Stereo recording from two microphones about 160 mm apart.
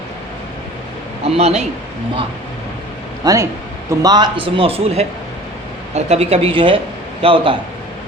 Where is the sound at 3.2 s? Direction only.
20° right (ahead or behind).